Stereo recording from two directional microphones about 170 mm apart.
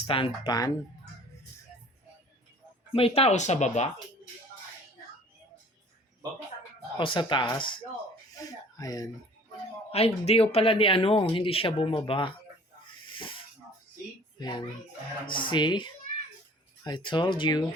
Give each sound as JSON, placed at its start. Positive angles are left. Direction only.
{"t": 0.1, "sound": "speech", "side_deg": 30}
{"t": 2.9, "sound": "speech", "side_deg": 35}
{"t": 7.0, "sound": "speech", "side_deg": 30}
{"t": 9.9, "sound": "speech", "side_deg": 35}
{"t": 13.1, "sound": "hiss", "side_deg": 30}
{"t": 14.3, "sound": "a child's voice", "side_deg": 25}